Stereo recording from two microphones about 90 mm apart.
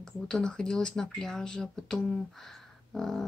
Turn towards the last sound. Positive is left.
turn(degrees=5)  # may be behind; listen again after turning